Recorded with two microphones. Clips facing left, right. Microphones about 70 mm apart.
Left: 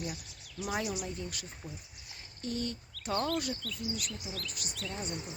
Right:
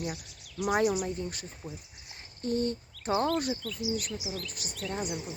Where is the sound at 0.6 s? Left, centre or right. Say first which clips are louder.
Right 8 dB; right.